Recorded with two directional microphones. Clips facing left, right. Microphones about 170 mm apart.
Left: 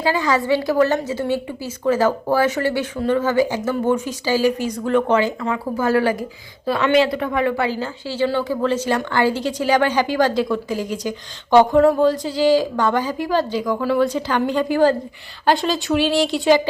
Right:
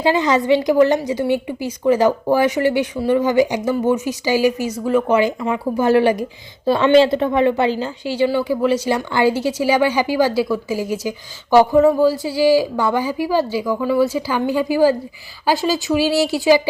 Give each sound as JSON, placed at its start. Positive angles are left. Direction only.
{"t": 0.0, "sound": "a woman's voice", "side_deg": -20}